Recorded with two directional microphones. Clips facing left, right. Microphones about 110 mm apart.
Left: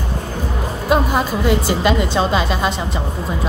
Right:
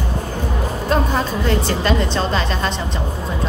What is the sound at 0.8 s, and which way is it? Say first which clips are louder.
A woman's voice: left 3 dB; 10° left (ahead or behind).